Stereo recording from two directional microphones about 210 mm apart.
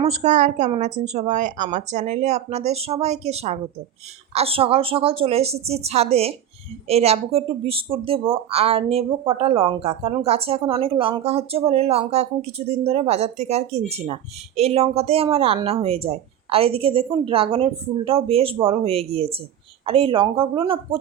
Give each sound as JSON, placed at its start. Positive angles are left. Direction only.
{"t": 0.0, "sound": "a woman's voice", "side_deg": -35}